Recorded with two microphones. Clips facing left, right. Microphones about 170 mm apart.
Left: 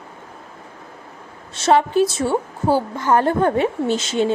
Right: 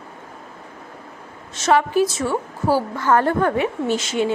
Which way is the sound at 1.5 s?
30° left (ahead or behind).